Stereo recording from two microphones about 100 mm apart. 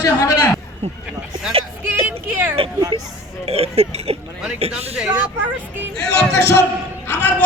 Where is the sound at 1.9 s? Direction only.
20° right (ahead or behind).